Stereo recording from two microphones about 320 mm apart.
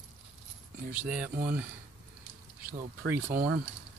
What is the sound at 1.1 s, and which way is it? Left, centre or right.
Speech, centre.